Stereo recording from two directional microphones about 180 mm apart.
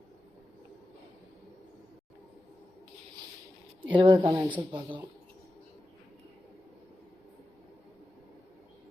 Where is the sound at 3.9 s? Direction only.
25° right (ahead or behind).